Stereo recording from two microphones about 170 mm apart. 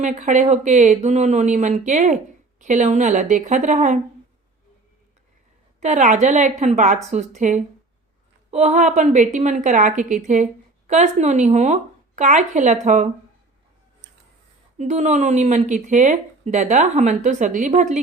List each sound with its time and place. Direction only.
0.0 s a woman's voice: 45° right (ahead or behind)
5.8 s a woman's voice: 45° right (ahead or behind)
14.8 s a woman's voice: 40° right (ahead or behind)